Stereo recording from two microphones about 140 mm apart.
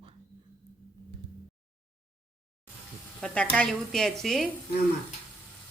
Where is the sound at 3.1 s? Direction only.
5° left (ahead or behind).